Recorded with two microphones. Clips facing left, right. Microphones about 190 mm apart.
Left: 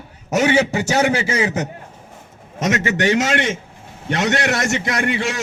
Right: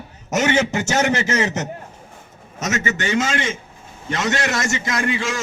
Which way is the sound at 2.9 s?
75° left (ahead or behind).